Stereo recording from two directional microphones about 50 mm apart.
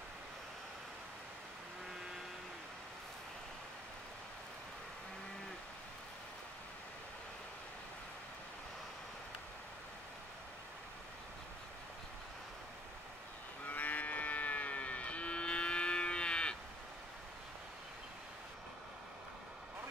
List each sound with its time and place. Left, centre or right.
13.7 s music: left